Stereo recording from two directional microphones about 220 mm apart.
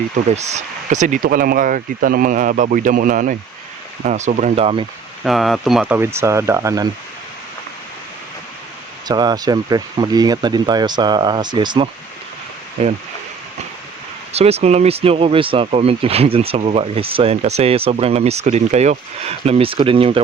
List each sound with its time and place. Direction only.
0.3 s speech: 30° right (ahead or behind)
5.2 s speech: centre (ahead or behind)
9.0 s speech: 20° right (ahead or behind)
14.3 s speech: 30° right (ahead or behind)